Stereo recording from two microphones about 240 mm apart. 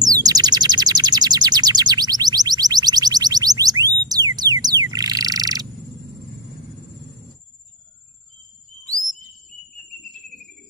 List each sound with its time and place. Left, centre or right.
0.0 s bird: centre